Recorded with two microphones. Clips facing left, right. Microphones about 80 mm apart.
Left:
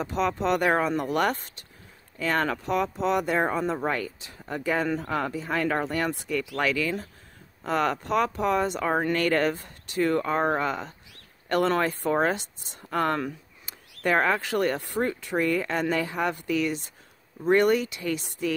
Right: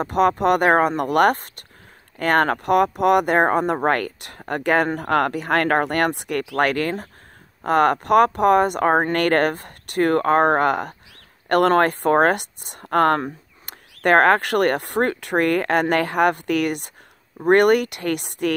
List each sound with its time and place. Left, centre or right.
0.0 s speech: right